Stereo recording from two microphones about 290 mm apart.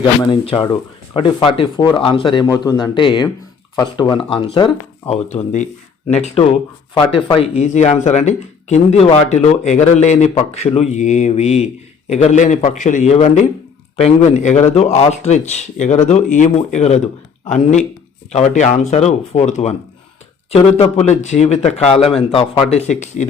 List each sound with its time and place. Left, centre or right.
0.2 s a man's voice: centre